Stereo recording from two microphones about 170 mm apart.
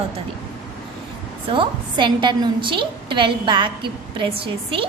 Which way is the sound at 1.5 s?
25° right (ahead or behind).